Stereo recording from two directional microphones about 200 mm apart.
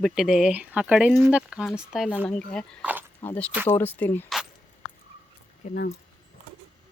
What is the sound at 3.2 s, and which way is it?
Speech, 10° left (ahead or behind).